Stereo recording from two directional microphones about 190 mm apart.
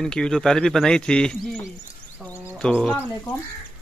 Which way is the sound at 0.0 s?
5° left (ahead or behind).